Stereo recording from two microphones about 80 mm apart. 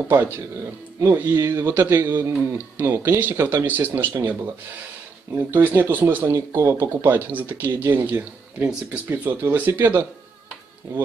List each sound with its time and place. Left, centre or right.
1.0 s speech: right